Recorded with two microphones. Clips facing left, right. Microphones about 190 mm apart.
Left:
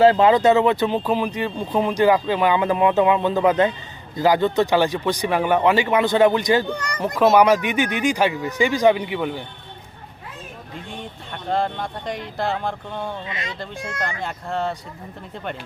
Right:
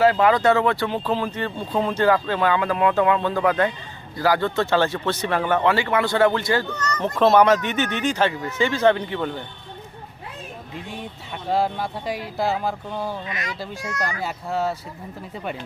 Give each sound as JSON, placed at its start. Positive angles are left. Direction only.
{"t": 0.0, "sound": "speech", "side_deg": 25}
{"t": 11.4, "sound": "speech", "side_deg": -5}
{"t": 13.2, "sound": "speech", "side_deg": 25}
{"t": 14.2, "sound": "speech", "side_deg": -5}